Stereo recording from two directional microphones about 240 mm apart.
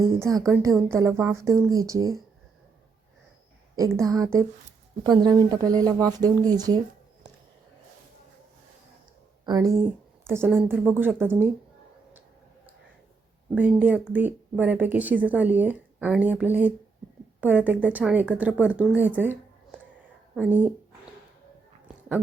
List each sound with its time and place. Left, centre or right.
0.0 s speech: centre
3.9 s speech: centre
9.5 s speech: centre
13.5 s speech: centre